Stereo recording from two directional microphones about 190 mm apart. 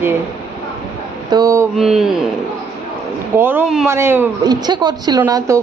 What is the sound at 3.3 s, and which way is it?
A woman's voice, 10° right (ahead or behind).